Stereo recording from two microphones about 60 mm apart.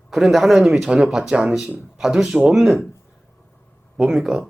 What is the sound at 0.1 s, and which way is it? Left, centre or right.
Speech, centre.